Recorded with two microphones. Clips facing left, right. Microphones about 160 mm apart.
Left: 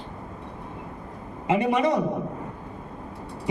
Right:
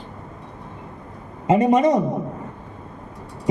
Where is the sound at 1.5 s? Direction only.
40° right (ahead or behind).